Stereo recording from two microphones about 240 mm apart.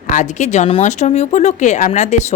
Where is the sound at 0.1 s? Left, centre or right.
Left.